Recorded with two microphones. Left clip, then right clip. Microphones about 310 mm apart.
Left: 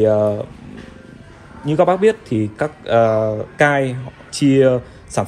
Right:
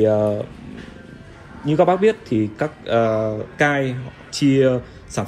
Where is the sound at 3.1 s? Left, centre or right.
Left.